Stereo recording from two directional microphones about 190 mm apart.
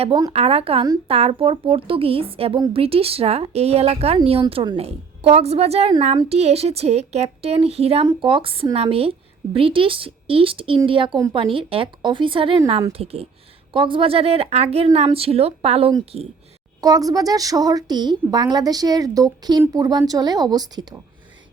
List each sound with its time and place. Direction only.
0.0 s a woman's voice: 20° right (ahead or behind)
16.8 s a woman's voice: 20° right (ahead or behind)